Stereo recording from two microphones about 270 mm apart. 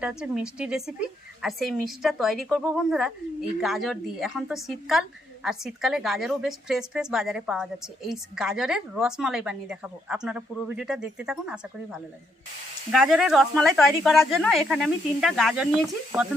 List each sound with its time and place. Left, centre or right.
0.0 s a woman's voice: centre